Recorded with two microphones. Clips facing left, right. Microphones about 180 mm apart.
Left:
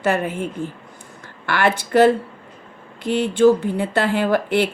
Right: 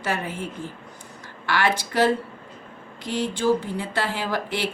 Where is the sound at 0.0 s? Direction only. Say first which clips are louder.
Left 7 dB; 55° left (ahead or behind).